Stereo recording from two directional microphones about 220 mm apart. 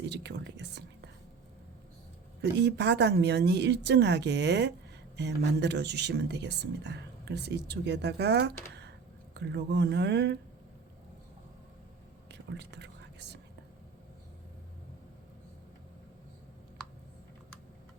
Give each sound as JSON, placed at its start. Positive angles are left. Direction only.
{"t": 0.0, "sound": "speech", "side_deg": -50}
{"t": 2.4, "sound": "speech", "side_deg": -50}
{"t": 12.3, "sound": "whispering", "side_deg": -50}